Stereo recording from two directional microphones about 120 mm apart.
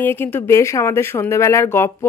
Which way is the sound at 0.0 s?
15° left (ahead or behind).